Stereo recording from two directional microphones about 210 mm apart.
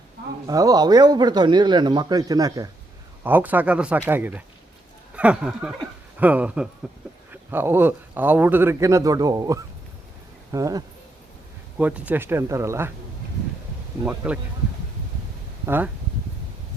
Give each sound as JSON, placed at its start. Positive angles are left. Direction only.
{"t": 0.4, "sound": "a man's voice", "side_deg": -15}
{"t": 14.0, "sound": "a man's voice", "side_deg": -5}
{"t": 15.6, "sound": "speech", "side_deg": -10}